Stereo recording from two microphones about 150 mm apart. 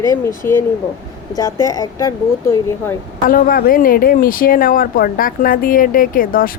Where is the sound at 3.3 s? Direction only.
70° left (ahead or behind).